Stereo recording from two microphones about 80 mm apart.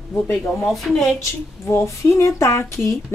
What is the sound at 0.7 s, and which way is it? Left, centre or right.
Speech, centre.